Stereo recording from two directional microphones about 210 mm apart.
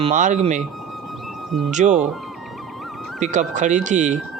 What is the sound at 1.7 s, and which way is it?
Speech, 35° right (ahead or behind).